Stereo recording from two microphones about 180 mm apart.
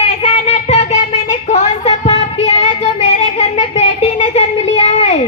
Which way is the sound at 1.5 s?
35° left (ahead or behind).